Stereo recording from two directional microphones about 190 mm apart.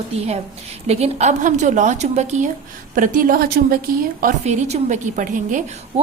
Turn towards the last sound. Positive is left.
turn(degrees=-40)  # may be behind; listen again after turning